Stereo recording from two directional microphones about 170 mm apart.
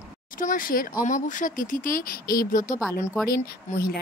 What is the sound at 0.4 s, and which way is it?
Speech, 50° left (ahead or behind).